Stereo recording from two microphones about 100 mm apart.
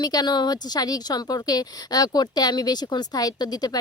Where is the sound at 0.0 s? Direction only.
40° left (ahead or behind).